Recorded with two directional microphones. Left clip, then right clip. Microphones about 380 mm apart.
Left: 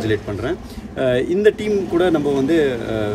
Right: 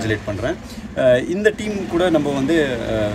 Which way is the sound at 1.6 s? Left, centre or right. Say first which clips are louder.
Left 2 dB; right.